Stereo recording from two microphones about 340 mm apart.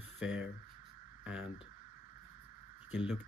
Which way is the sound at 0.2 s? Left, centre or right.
Centre.